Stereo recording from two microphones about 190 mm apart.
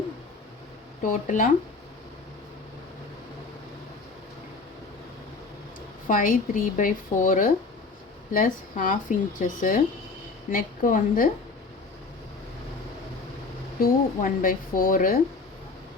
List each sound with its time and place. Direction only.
1.0 s speech: 45° left (ahead or behind)
6.1 s speech: 45° left (ahead or behind)
13.7 s speech: 50° left (ahead or behind)